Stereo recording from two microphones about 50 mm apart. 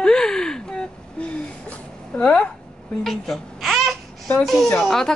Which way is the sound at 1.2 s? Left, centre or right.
Left.